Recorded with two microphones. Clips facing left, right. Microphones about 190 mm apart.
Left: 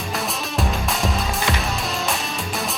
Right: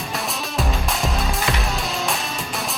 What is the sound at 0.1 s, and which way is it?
Music, centre (ahead or behind).